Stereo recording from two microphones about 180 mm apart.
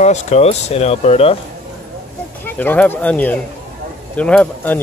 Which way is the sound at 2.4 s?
10° left (ahead or behind).